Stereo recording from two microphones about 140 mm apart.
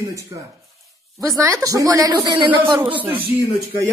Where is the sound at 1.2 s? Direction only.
25° right (ahead or behind).